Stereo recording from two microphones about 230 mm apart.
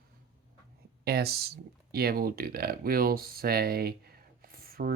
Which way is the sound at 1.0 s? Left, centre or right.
Right.